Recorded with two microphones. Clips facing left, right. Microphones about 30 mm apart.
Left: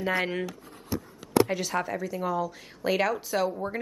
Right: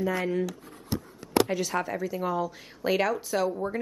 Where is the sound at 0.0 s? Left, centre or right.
Left.